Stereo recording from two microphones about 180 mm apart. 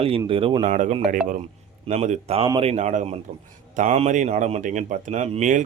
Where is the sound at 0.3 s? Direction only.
30° right (ahead or behind).